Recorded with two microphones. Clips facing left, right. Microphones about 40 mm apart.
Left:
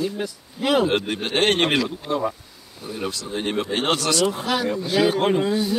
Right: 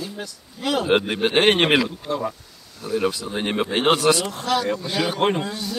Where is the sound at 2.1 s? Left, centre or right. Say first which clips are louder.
Left 2 dB; centre.